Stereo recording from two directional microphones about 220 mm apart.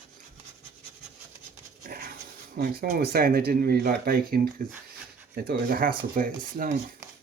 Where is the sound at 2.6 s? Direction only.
45° right (ahead or behind).